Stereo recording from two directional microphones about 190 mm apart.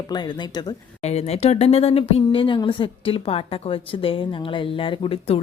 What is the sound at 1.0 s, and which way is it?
Speech, 35° left (ahead or behind).